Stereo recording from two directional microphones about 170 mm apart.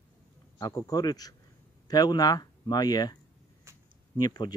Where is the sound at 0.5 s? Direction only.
20° left (ahead or behind).